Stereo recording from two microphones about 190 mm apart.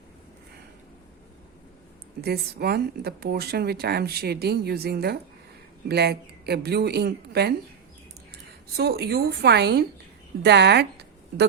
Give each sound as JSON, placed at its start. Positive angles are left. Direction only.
{"t": 2.2, "sound": "a woman's voice", "side_deg": -55}